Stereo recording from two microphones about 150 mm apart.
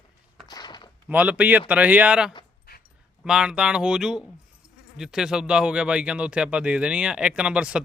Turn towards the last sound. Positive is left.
turn(degrees=-5)  # may be behind; listen again after turning